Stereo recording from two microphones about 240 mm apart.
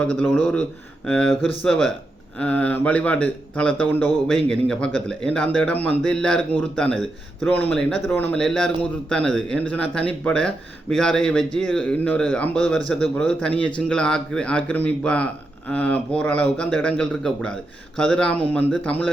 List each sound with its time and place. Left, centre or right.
0.0 s speech: centre